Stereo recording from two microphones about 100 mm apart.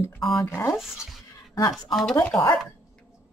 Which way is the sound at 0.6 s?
25° left (ahead or behind).